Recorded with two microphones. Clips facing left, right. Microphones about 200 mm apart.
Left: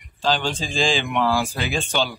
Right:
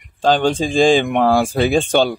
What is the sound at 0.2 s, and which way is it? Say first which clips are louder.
Speech: right 8 dB; 55° right (ahead or behind).